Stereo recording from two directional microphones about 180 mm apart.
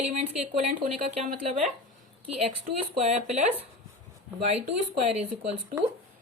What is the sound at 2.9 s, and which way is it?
A woman's voice, 35° right (ahead or behind).